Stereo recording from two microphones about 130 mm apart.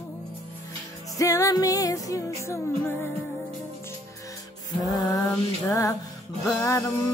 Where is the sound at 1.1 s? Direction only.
25° left (ahead or behind).